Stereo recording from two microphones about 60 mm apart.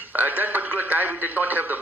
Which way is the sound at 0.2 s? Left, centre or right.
Right.